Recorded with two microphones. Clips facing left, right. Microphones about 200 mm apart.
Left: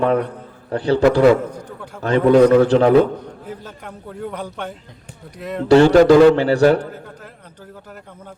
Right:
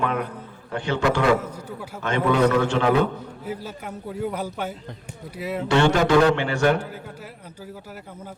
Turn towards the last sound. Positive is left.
turn(degrees=35)  # may be behind; listen again after turning